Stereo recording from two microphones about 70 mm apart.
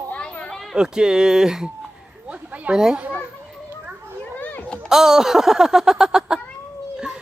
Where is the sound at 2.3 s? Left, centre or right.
Centre.